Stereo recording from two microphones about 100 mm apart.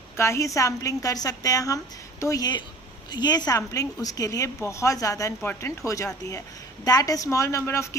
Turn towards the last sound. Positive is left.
turn(degrees=30)  # may be behind; listen again after turning